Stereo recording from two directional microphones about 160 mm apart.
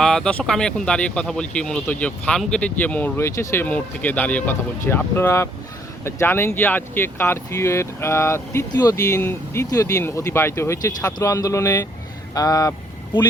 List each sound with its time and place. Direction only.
0.0 s speech: 5° left (ahead or behind); by 12.7 s 20° left (ahead or behind)